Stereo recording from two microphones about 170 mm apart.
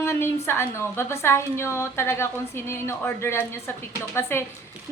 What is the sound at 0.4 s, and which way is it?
A woman's voice, 15° left (ahead or behind).